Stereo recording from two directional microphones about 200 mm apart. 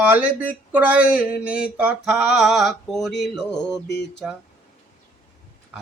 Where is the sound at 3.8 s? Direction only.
60° left (ahead or behind).